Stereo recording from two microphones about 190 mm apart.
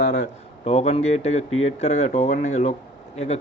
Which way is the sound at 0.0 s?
40° left (ahead or behind).